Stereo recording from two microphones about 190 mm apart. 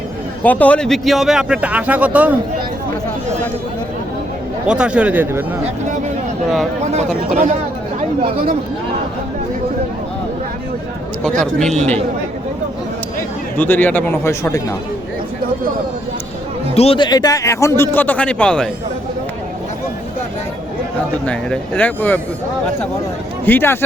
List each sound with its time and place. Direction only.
0.4 s speech: 10° left (ahead or behind); by 2.4 s 5° right (ahead or behind)
4.7 s speech: 5° right (ahead or behind)
11.2 s speech: 5° left (ahead or behind)
13.6 s speech: 10° left (ahead or behind)
16.7 s speech: 30° left (ahead or behind); by 18.7 s 5° left (ahead or behind)
21.2 s speech: 5° left (ahead or behind)
23.5 s speech: 10° left (ahead or behind)